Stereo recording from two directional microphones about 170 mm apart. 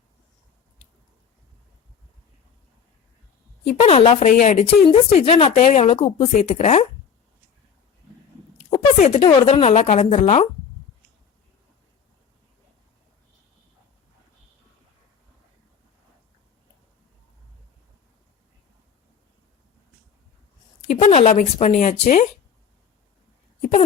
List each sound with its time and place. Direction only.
3.7 s a woman's voice: 40° left (ahead or behind)
5.5 s a woman's voice: 45° left (ahead or behind)
9.0 s a woman's voice: 40° left (ahead or behind)
20.9 s speech: 45° left (ahead or behind)